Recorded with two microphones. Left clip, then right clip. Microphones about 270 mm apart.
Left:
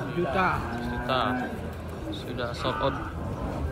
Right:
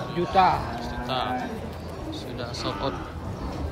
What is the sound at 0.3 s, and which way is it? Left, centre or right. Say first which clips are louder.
Cattle: right 7 dB; right.